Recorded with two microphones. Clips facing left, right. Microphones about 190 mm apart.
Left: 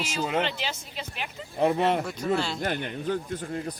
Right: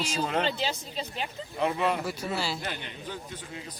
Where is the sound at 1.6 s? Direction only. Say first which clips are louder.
Left 4 dB; 45° left (ahead or behind).